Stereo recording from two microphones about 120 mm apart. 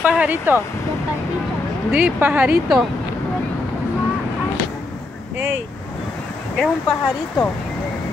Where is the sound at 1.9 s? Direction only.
15° right (ahead or behind).